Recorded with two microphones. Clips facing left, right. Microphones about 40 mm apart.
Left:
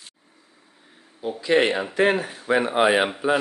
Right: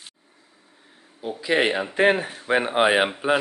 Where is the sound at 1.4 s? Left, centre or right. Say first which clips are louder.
Left 2 dB; centre.